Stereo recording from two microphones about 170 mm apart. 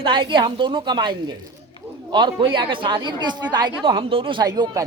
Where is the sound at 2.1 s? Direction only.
25° right (ahead or behind).